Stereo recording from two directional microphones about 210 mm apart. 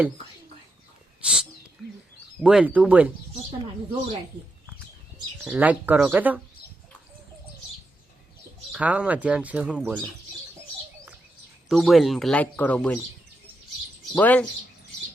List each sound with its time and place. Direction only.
1.2 s speech: 5° right (ahead or behind)
2.4 s speech: 5° right (ahead or behind)
5.4 s speech: 5° right (ahead or behind)
8.7 s speech: 5° right (ahead or behind)
11.7 s speech: centre (ahead or behind)
14.2 s speech: 5° left (ahead or behind)